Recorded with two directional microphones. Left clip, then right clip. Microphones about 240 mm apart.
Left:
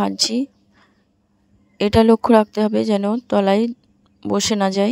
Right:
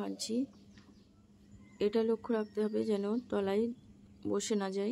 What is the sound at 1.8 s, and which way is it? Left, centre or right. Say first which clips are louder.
A woman's voice: left 17 dB; left.